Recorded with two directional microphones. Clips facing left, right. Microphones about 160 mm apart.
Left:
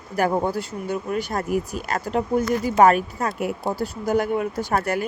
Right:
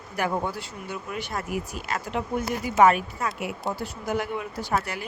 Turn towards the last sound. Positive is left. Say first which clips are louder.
# left 5 dB
turn(degrees=50)  # may be behind; listen again after turning